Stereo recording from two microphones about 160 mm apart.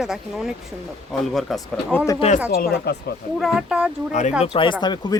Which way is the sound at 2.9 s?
90° left.